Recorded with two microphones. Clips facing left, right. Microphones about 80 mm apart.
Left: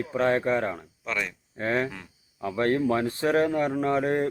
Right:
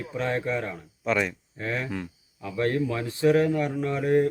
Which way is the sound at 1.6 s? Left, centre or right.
Left.